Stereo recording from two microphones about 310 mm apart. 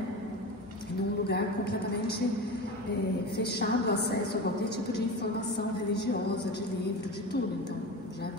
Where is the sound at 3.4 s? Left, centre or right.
Left.